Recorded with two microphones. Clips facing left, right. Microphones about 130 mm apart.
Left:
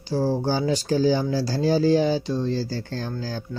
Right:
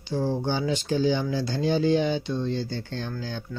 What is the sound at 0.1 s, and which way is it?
Speech, 35° left (ahead or behind).